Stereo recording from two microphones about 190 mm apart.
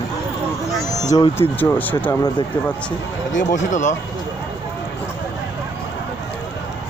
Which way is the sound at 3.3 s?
40° left (ahead or behind).